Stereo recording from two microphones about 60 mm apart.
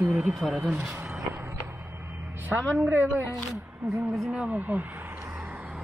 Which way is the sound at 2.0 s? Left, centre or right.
Right.